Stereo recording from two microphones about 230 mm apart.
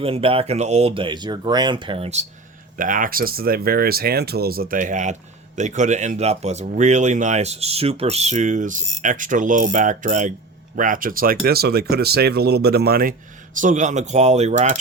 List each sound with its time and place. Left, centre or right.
0.0 s speech: right